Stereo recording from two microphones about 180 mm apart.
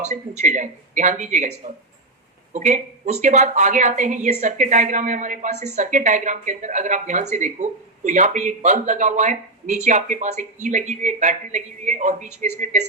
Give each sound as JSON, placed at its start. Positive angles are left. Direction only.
{"t": 0.0, "sound": "speech", "side_deg": -40}